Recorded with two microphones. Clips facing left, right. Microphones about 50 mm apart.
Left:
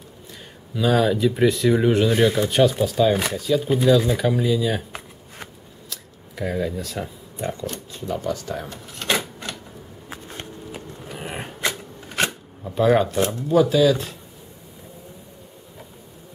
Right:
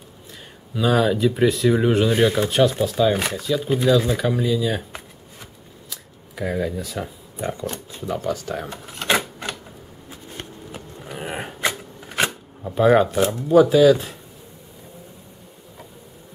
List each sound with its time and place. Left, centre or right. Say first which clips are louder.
0.7 s speech: even; centre
5.9 s a sound: left 1 dB; centre
7.9 s speech: right 1 dB; centre
9.0 s typewriter: right 3 dB; right
11.1 s a sound: right 3 dB; centre
12.2 s speech: right 1 dB; centre